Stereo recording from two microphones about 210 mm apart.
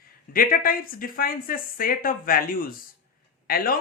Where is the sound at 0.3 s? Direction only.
45° left (ahead or behind).